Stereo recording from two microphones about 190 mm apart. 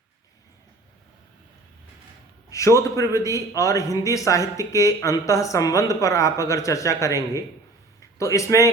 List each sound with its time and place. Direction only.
2.5 s a man's voice: 15° left (ahead or behind)